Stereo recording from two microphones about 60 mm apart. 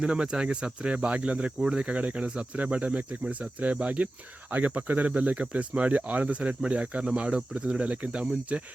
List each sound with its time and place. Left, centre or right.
0.0 s speech: centre